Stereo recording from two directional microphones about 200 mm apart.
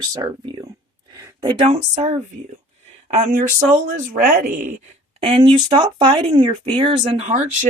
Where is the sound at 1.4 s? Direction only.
25° right (ahead or behind); by 4.4 s 45° right (ahead or behind).